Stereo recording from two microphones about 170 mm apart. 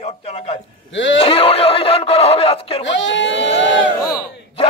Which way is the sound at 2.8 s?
90° left.